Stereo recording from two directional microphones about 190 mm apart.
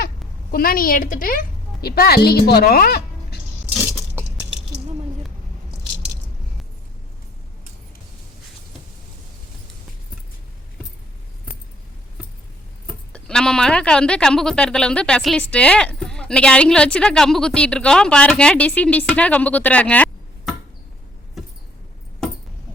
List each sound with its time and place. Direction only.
0.5 s a woman's voice: 50° left (ahead or behind)
13.1 s speech: 5° left (ahead or behind)
21.4 s mouse: centre (ahead or behind)